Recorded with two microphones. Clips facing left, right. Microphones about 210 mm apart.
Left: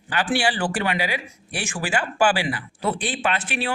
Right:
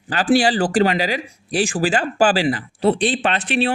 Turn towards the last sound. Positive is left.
turn(degrees=-35)  # may be behind; listen again after turning